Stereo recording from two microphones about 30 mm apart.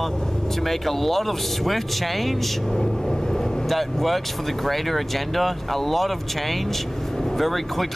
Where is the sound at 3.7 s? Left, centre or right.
Centre.